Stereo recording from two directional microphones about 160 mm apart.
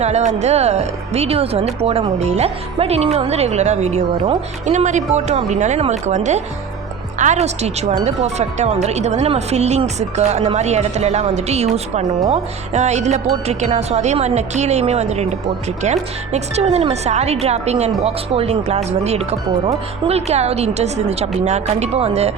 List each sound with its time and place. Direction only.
0.0 s speech: 45° right (ahead or behind)